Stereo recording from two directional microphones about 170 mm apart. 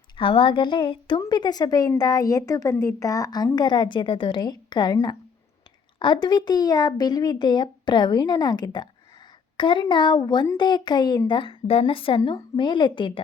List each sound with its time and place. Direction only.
0.2 s a woman's voice: 30° left (ahead or behind)